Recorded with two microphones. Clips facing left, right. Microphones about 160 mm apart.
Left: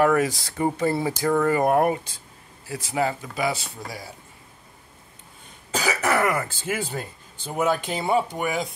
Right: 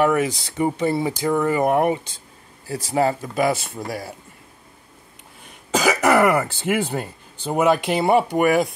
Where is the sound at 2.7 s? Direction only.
40° right (ahead or behind); by 4.1 s 55° right (ahead or behind).